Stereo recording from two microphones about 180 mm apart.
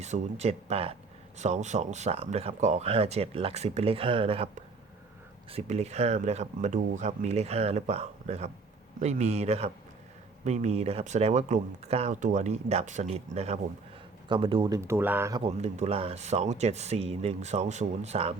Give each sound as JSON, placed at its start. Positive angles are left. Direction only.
{"t": 0.0, "sound": "speech", "side_deg": -40}
{"t": 14.8, "sound": "speech", "side_deg": -15}
{"t": 15.4, "sound": "speech", "side_deg": -35}